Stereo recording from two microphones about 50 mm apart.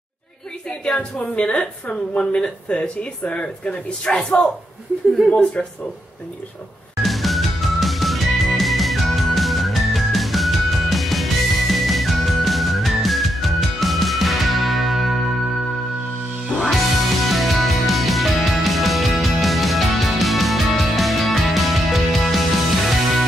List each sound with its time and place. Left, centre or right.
0.7 s a woman's voice: centre
7.0 s music: centre
17.2 s music: centre